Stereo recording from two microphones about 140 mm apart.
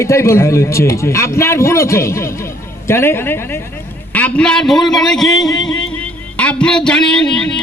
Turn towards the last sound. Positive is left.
turn(degrees=5)  # may be behind; listen again after turning